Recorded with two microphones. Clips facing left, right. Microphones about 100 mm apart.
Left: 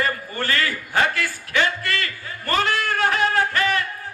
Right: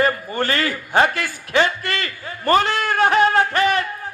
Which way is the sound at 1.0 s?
25° right (ahead or behind).